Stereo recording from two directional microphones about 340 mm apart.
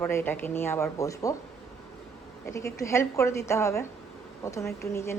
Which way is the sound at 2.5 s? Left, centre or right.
Centre.